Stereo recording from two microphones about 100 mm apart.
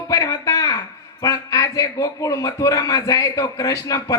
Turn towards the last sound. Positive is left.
turn(degrees=35)  # may be behind; listen again after turning